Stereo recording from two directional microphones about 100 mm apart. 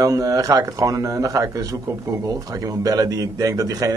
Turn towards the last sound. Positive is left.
turn(degrees=-35)  # may be behind; listen again after turning